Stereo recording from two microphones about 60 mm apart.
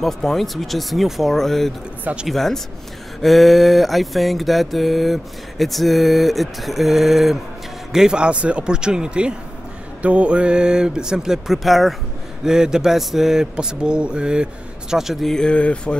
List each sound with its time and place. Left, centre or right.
0.0 s mantra: centre
7.9 s speech: centre
15.2 s speech: centre